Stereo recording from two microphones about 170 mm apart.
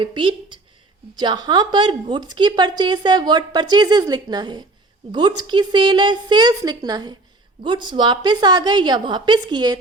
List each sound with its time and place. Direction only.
0.0 s a woman's voice: 30° right (ahead or behind)